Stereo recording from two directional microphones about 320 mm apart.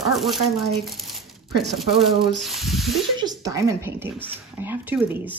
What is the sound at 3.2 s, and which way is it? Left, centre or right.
Speech, centre.